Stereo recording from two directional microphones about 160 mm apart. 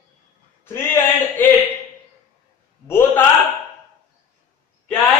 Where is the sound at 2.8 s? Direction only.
15° left (ahead or behind).